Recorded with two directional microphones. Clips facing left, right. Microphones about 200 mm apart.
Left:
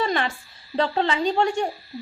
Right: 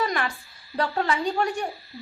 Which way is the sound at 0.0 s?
25° left (ahead or behind).